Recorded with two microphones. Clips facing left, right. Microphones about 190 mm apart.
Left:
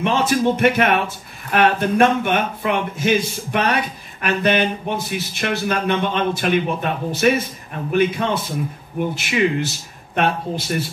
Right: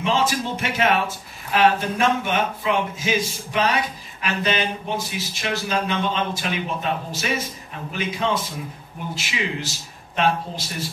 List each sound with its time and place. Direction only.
0.0 s speech: 60° left (ahead or behind)